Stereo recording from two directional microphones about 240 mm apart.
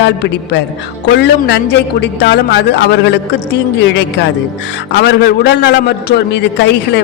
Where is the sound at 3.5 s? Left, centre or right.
Left.